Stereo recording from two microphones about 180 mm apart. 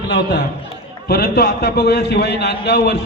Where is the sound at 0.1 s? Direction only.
70° left (ahead or behind).